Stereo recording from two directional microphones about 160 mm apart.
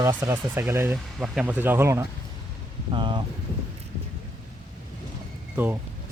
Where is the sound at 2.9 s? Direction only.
30° right (ahead or behind).